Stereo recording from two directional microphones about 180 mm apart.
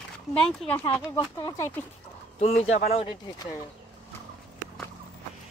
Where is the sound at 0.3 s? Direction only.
Centre (ahead or behind).